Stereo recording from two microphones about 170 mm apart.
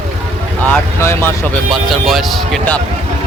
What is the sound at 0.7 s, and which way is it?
Speech, 15° left (ahead or behind).